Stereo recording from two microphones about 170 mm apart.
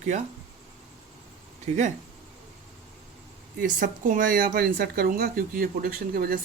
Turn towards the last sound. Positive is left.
turn(degrees=-60)  # may be behind; listen again after turning